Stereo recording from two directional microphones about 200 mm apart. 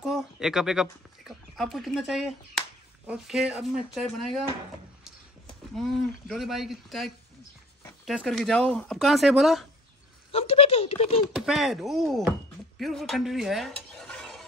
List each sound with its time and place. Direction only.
0.0 s speech: centre (ahead or behind)
5.8 s speech: centre (ahead or behind)
10.3 s speech: 30° left (ahead or behind)
11.3 s speech: centre (ahead or behind)
12.7 s stir: centre (ahead or behind)